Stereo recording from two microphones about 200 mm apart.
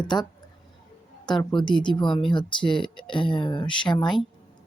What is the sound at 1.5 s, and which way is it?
Speech, 25° left (ahead or behind).